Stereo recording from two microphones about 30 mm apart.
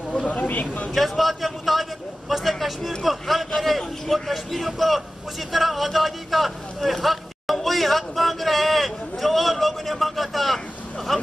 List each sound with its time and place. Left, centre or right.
0.2 s speech: left
0.9 s a man's voice: centre